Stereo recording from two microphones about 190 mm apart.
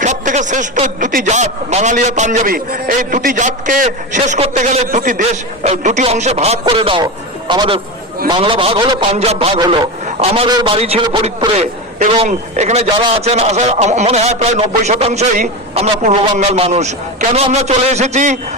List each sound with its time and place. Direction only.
0.0 s a man's voice: 40° right (ahead or behind)